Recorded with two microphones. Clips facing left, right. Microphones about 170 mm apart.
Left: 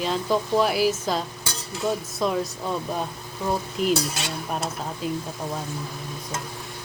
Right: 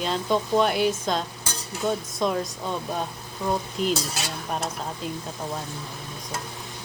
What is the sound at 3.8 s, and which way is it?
Speech, 5° left (ahead or behind).